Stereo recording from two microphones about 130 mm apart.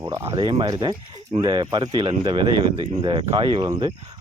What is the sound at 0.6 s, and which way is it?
Speech, 35° right (ahead or behind).